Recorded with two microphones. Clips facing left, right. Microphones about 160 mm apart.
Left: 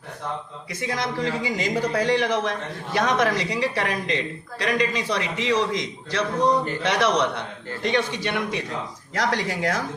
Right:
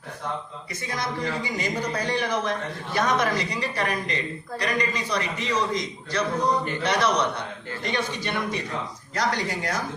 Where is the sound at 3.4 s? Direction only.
90° left.